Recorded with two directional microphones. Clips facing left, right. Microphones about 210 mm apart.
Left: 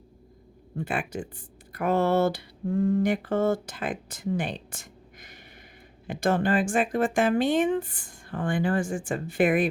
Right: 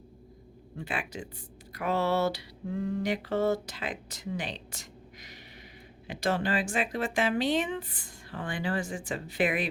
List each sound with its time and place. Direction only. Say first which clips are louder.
0.8 s mantra: left 5 dB; 50° left (ahead or behind)